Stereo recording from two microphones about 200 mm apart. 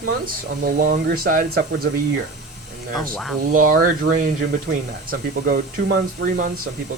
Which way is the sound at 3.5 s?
40° right (ahead or behind).